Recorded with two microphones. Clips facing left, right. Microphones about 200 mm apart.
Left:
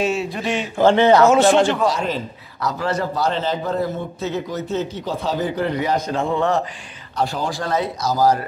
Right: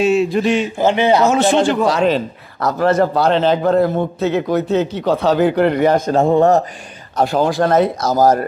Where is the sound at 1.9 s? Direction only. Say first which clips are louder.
Right 7 dB; 75° right (ahead or behind).